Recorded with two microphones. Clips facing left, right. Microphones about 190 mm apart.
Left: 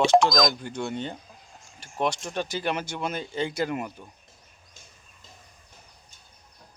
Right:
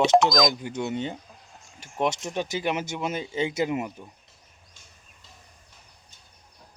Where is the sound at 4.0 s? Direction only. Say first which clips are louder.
Right 2 dB; 10° right (ahead or behind).